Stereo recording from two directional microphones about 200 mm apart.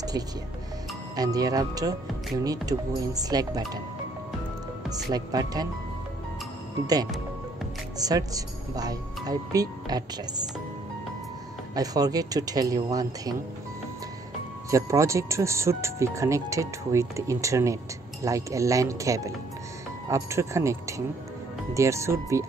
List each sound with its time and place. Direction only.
1.1 s speech: 20° right (ahead or behind)
5.1 s speech: 20° right (ahead or behind)
8.0 s speech: 20° right (ahead or behind)
11.7 s speech: 20° right (ahead or behind)
14.7 s speech: 15° right (ahead or behind)